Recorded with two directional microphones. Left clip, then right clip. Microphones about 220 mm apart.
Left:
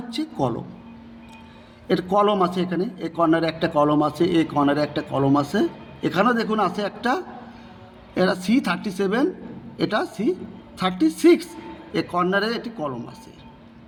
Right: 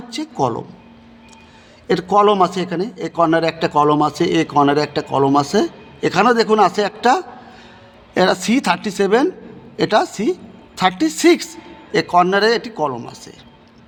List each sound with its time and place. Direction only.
0.1 s a man's voice: 50° right (ahead or behind)
1.9 s a man's voice: 50° right (ahead or behind)